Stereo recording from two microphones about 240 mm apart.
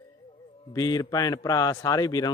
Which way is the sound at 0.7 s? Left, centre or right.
Centre.